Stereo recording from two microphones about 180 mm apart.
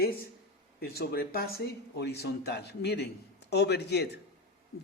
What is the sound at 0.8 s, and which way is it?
Speech, 60° left (ahead or behind).